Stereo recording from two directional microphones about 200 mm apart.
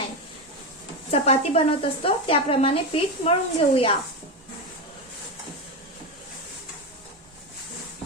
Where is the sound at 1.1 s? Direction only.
30° left (ahead or behind).